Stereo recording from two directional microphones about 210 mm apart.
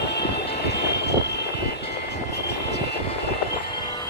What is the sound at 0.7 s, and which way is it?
Vehicle, 55° left (ahead or behind).